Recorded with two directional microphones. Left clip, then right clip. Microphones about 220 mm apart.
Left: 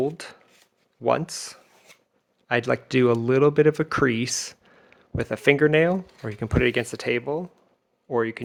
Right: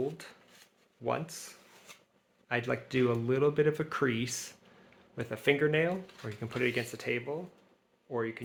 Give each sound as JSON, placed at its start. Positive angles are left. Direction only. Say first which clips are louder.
{"t": 1.0, "sound": "speech", "louder": "left 11 dB", "side_deg": 45}